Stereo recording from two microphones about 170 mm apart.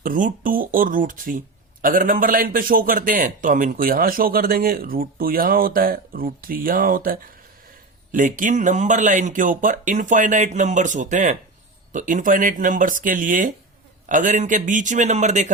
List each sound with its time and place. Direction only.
0.0 s a man's voice: 55° right (ahead or behind)